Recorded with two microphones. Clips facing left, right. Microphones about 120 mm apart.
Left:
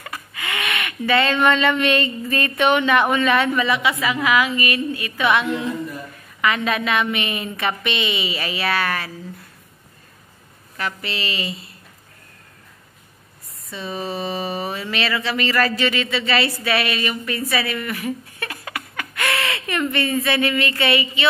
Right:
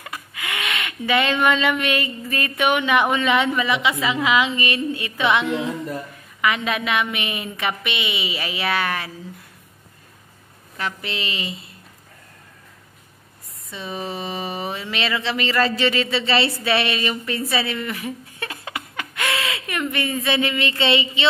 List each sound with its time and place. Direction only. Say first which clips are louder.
0.0 s a sound: left 1 dB; 15° right (ahead or behind)
1.4 s speech: left 2 dB; 10° right (ahead or behind)
10.8 s speech: left 1 dB; 20° right (ahead or behind)
13.7 s speech: left 2 dB; 15° right (ahead or behind)